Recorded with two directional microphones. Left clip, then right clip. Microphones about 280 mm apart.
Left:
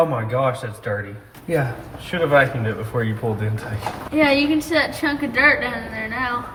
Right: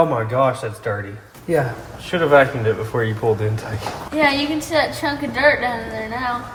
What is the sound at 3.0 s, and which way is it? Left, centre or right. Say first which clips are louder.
Speech: right 2 dB; right.